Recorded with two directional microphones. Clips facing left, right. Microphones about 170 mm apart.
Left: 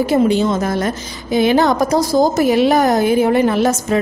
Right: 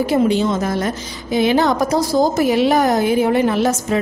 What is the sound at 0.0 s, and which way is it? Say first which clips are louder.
A woman's voice: left 2 dB; 45° left (ahead or behind).